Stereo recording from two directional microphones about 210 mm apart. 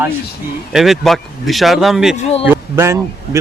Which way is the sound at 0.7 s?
Centre (ahead or behind).